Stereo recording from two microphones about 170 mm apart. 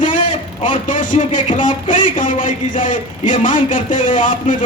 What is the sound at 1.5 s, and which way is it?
A man's voice, 50° left (ahead or behind).